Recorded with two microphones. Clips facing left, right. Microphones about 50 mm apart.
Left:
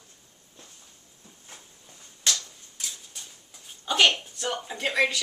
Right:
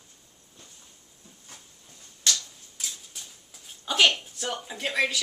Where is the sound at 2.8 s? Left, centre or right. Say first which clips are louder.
Even; centre.